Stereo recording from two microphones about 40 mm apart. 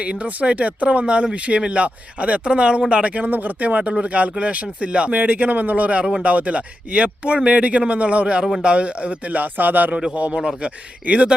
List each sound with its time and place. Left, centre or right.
0.0 s speech: right
5.1 s speech: right
7.3 s speech: right
7.6 s speech: right
10.3 s speech: right